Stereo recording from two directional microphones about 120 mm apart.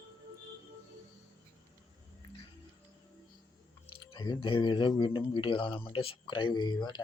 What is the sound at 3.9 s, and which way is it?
Speech, 40° left (ahead or behind).